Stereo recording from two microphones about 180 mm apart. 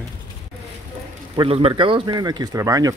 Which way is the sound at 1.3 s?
30° right (ahead or behind).